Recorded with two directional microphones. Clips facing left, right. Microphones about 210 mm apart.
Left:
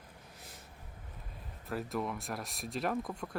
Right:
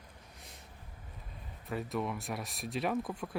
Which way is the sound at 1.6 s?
Centre (ahead or behind).